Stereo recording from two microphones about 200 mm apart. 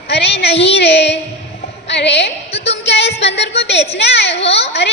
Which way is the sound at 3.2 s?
60° left (ahead or behind).